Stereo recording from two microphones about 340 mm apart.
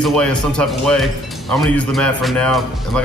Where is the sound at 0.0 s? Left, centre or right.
Centre.